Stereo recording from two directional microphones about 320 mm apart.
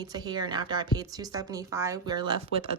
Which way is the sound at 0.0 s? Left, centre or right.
Centre.